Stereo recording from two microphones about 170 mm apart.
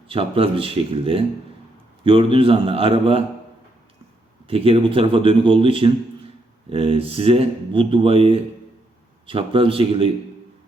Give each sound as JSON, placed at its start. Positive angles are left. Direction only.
{"t": 0.1, "sound": "speech", "side_deg": -35}
{"t": 4.4, "sound": "speech", "side_deg": -35}